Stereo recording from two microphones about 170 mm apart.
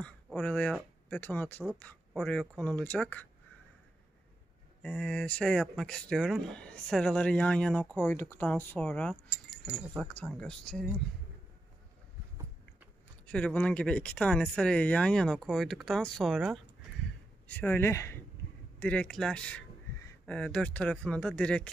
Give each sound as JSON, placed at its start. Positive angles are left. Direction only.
{"t": 0.0, "sound": "speech", "side_deg": 5}
{"t": 4.8, "sound": "speech", "side_deg": 5}
{"t": 10.2, "sound": "speech", "side_deg": 0}
{"t": 13.3, "sound": "speech", "side_deg": 5}